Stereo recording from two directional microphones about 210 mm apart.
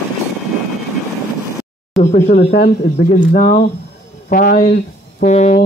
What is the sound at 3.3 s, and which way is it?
Speech, 35° left (ahead or behind).